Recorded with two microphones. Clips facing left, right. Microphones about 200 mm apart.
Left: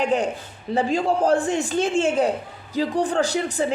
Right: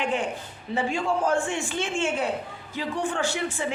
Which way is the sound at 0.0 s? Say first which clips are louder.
Left 5 dB; 40° left (ahead or behind).